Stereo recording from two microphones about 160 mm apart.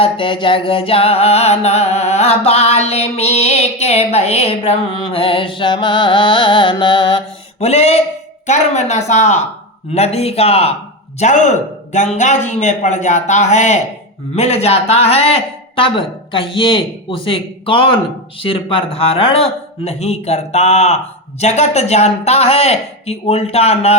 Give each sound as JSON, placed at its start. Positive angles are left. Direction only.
{"t": 0.0, "sound": "music", "side_deg": 35}
{"t": 8.4, "sound": "a man's voice", "side_deg": 45}
{"t": 9.9, "sound": "music", "side_deg": 40}
{"t": 11.2, "sound": "a man's voice", "side_deg": 50}
{"t": 14.3, "sound": "music", "side_deg": 40}